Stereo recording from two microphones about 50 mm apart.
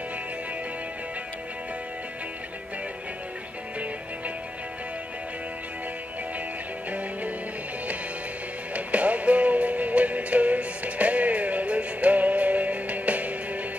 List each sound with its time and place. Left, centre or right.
8.7 s music: right